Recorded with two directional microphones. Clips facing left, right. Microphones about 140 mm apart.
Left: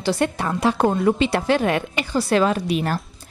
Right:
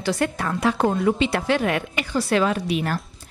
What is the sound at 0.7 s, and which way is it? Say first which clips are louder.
A woman's voice: left 2 dB; 45° left (ahead or behind).